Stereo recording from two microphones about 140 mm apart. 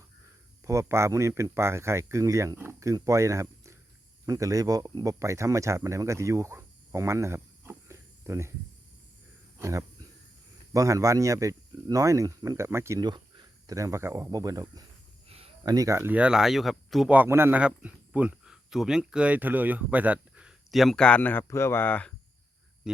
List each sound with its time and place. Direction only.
0.6 s speech: 20° right (ahead or behind)
9.6 s speech: 20° right (ahead or behind)
13.1 s speech: 30° right (ahead or behind); by 17.2 s centre (ahead or behind)
17.2 s speech: 15° right (ahead or behind); by 22.1 s 10° left (ahead or behind)